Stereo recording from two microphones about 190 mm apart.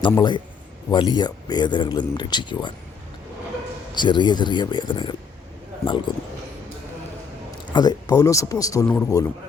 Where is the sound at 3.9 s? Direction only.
25° left (ahead or behind).